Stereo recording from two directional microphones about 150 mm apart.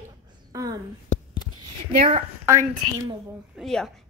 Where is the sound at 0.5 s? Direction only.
20° right (ahead or behind).